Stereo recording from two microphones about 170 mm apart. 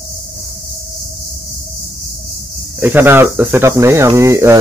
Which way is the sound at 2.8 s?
10° right (ahead or behind).